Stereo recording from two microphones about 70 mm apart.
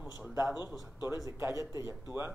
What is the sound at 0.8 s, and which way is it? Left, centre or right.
Speech, right.